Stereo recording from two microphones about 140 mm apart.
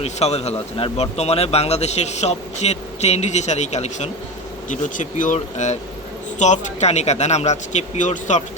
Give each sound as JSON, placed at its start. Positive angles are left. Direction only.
{"t": 0.0, "sound": "a man's voice", "side_deg": 50}